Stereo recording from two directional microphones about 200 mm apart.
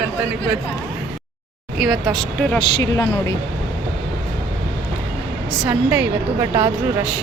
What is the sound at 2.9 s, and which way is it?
Speech, 20° left (ahead or behind).